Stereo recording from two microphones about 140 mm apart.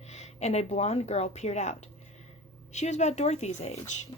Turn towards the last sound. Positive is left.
turn(degrees=55)  # may be behind; listen again after turning